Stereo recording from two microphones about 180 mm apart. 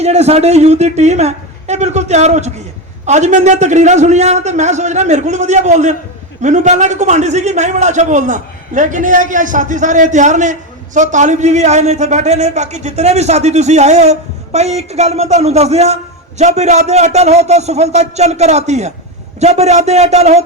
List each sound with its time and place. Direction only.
0.0 s a man's voice: 35° right (ahead or behind)